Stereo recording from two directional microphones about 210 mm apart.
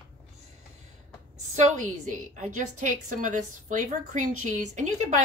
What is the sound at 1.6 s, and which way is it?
A woman's voice, 35° right (ahead or behind).